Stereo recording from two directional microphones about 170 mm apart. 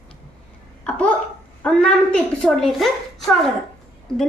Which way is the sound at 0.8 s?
5° left (ahead or behind).